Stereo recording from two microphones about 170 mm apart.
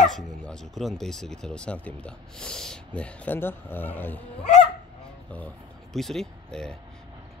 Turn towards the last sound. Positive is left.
turn(degrees=5)  # may be behind; listen again after turning